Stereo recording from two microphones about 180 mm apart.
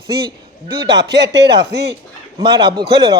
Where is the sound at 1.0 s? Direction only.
70° right (ahead or behind).